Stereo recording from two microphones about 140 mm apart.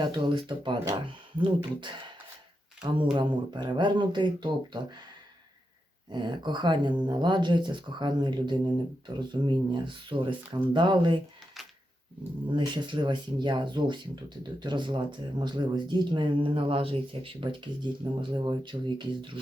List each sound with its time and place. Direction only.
0.0 s speech: 35° right (ahead or behind)
6.1 s speech: 30° right (ahead or behind)
12.5 s speech: 35° right (ahead or behind)